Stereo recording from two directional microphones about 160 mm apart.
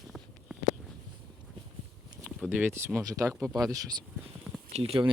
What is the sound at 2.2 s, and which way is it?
Speech, 10° right (ahead or behind).